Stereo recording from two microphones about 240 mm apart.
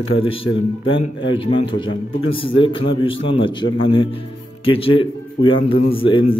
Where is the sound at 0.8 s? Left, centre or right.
Left.